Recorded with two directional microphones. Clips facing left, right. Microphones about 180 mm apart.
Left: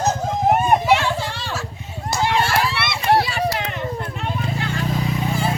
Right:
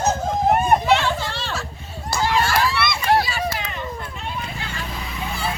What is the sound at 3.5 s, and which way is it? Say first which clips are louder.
Vehicle: left 4 dB; 60° left (ahead or behind).